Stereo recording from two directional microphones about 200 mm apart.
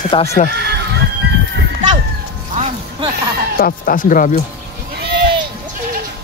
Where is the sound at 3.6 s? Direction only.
45° left (ahead or behind).